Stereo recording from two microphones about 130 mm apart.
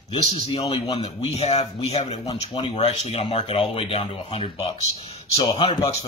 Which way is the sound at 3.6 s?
45° left (ahead or behind).